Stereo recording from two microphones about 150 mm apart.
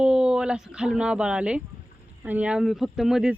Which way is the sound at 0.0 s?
5° right (ahead or behind).